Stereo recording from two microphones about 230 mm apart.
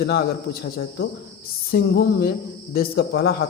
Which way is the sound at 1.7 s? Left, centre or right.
Left.